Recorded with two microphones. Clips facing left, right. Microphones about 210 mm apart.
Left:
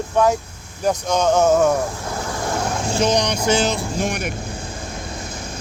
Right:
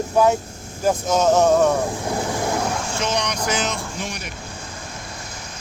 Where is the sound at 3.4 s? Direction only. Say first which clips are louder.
Left 5 dB; 30° left (ahead or behind).